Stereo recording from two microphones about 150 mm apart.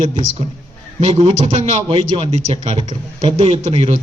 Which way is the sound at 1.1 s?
50° right (ahead or behind).